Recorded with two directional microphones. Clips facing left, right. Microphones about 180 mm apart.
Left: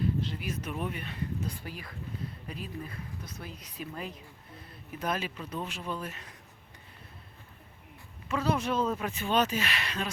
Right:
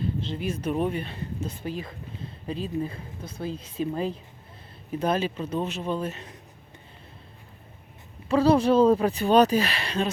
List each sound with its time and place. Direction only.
0.0 s speech: 25° right (ahead or behind)
8.3 s speech: 30° right (ahead or behind)